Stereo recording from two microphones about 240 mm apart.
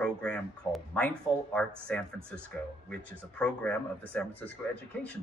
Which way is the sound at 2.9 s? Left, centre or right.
Centre.